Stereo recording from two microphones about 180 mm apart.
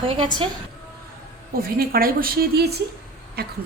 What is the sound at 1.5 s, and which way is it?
Speech, 55° right (ahead or behind).